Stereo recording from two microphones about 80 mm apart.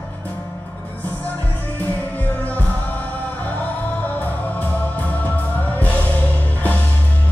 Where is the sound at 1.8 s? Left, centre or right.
Centre.